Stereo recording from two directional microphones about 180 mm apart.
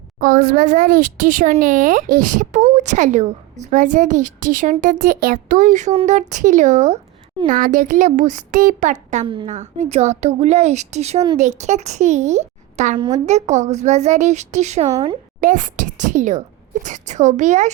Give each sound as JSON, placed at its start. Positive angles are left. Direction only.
{"t": 0.2, "sound": "speech", "side_deg": -50}
{"t": 9.2, "sound": "a woman's voice", "side_deg": -25}
{"t": 9.5, "sound": "a woman's voice", "side_deg": -40}
{"t": 13.0, "sound": "a woman's voice", "side_deg": -25}
{"t": 13.2, "sound": "a woman's voice", "side_deg": -40}